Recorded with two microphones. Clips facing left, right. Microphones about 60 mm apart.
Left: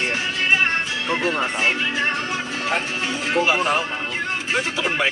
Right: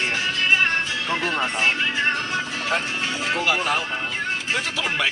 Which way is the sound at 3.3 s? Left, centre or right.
Left.